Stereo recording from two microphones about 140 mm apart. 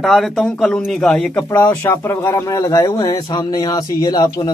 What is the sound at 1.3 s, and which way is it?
Speech, 15° left (ahead or behind).